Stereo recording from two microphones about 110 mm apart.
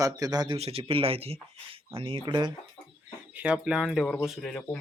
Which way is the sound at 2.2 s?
40° right (ahead or behind).